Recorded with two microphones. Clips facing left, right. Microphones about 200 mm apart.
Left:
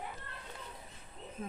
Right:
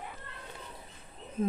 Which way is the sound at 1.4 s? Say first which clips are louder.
Right 12 dB; 40° right (ahead or behind).